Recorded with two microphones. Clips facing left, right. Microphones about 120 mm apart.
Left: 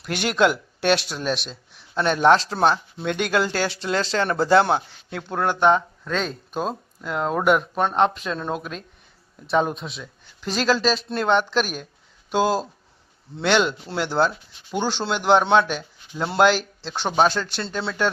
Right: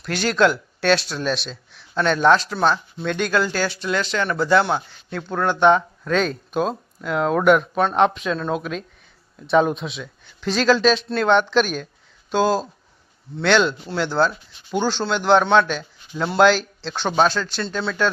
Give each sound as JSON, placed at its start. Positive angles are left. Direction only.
{"t": 0.0, "sound": "speech", "side_deg": 15}
{"t": 2.6, "sound": "speech", "side_deg": 20}
{"t": 5.5, "sound": "speech", "side_deg": 5}